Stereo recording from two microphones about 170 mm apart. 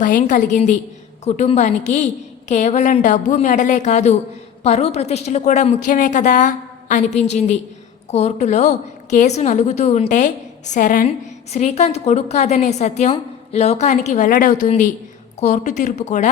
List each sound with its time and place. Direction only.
0.0 s a woman's voice: 50° left (ahead or behind)
11.5 s a woman's voice: 40° left (ahead or behind)